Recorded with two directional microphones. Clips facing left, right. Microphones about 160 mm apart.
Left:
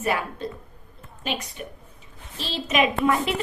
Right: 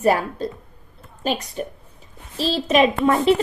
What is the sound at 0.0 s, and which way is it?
A woman's voice, 35° right (ahead or behind).